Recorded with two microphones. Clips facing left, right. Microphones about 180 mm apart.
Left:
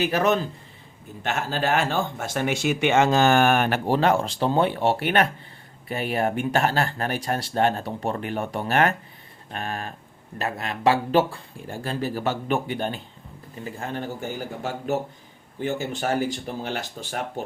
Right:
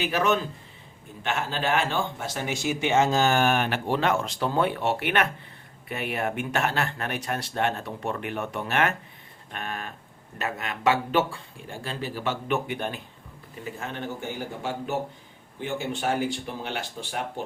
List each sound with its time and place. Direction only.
0.0 s speech: 40° left (ahead or behind)